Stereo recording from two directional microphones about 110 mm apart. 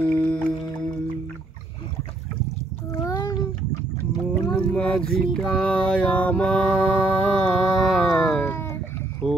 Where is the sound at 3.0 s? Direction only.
35° left (ahead or behind).